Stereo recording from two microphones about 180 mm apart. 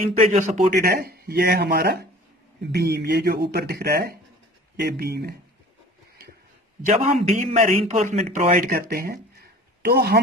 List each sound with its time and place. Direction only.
0.0 s speech: 40° right (ahead or behind)
0.7 s speech: 55° right (ahead or behind)
6.8 s a man's voice: 35° right (ahead or behind)
8.5 s speech: 55° right (ahead or behind)